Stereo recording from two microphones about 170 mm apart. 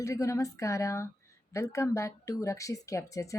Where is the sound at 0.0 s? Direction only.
20° left (ahead or behind).